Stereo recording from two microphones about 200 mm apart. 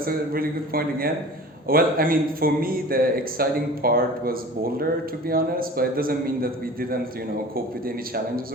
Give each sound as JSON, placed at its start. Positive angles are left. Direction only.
{"t": 0.0, "sound": "a man's voice", "side_deg": -45}